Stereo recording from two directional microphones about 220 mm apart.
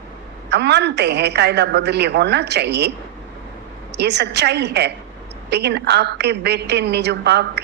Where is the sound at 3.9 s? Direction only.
50° right (ahead or behind).